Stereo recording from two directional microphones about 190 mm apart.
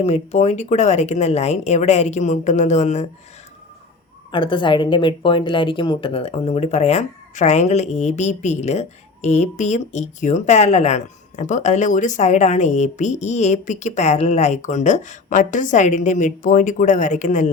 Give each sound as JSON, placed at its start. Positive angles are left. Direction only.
{"t": 0.0, "sound": "a woman's voice", "side_deg": 35}
{"t": 4.3, "sound": "a woman's voice", "side_deg": 25}